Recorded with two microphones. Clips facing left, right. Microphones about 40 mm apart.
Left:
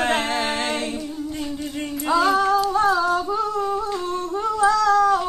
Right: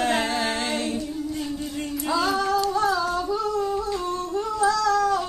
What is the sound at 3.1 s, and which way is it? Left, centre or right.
Humming, left.